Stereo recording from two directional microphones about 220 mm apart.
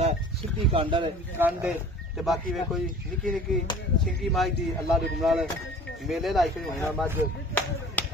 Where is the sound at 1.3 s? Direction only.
10° right (ahead or behind).